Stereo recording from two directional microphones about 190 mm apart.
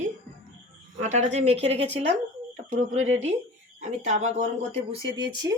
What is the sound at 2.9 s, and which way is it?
Speech, 90° right.